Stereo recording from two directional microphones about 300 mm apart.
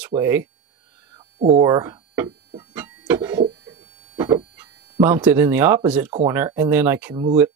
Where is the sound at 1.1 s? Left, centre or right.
Centre.